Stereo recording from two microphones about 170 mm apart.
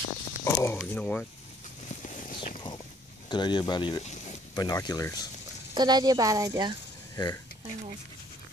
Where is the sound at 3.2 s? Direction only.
25° left (ahead or behind).